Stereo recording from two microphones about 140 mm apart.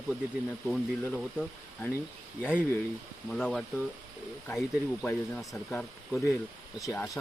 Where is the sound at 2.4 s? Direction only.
10° left (ahead or behind).